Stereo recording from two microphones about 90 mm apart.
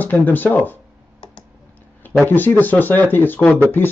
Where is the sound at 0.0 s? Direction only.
20° left (ahead or behind).